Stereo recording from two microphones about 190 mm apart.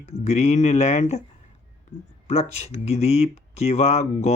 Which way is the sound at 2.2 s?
35° left (ahead or behind).